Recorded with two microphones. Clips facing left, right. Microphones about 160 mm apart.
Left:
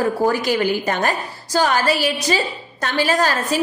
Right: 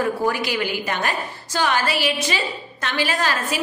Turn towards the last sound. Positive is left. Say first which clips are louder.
# left 5 dB
turn(degrees=40)  # may be behind; listen again after turning